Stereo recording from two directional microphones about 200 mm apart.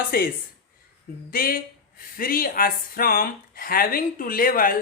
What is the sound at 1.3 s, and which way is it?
Speech, 45° left (ahead or behind).